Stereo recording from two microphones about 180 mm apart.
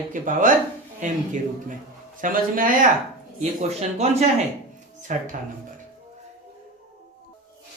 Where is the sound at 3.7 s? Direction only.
35° right (ahead or behind).